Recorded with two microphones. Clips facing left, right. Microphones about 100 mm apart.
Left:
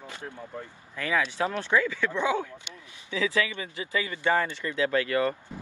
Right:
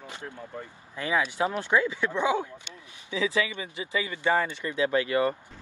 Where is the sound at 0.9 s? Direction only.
20° right (ahead or behind).